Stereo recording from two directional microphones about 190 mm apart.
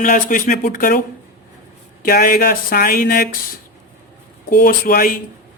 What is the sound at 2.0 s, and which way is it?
Speech, 50° left (ahead or behind).